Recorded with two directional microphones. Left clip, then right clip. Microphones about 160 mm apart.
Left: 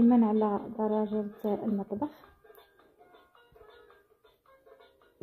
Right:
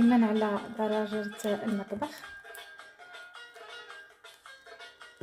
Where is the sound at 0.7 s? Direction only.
10° left (ahead or behind).